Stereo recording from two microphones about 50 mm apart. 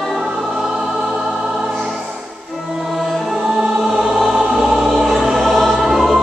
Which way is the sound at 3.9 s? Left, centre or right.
Centre.